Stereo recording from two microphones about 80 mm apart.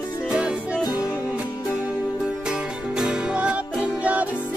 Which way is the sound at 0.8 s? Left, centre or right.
Left.